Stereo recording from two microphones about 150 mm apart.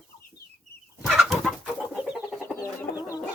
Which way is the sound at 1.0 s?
5° right (ahead or behind).